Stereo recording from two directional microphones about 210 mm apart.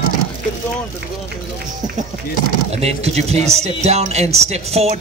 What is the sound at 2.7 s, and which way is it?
A man's voice, 30° right (ahead or behind).